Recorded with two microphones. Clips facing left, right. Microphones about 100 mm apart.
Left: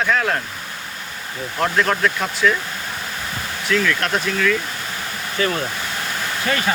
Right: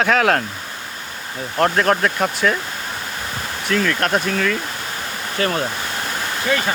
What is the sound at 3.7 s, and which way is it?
Speech, 40° right (ahead or behind).